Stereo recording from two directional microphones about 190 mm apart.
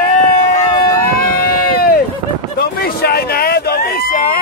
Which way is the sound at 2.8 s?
55° left (ahead or behind).